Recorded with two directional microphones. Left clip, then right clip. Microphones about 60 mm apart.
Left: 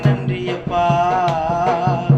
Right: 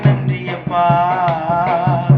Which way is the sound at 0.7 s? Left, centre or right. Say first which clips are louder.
Right 2 dB; left.